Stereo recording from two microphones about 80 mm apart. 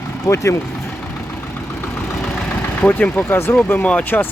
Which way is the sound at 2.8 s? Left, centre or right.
Centre.